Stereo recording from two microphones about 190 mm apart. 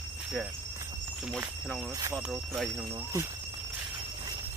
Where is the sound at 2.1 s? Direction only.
Centre (ahead or behind).